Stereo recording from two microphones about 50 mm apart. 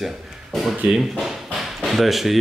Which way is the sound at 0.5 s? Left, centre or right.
Centre.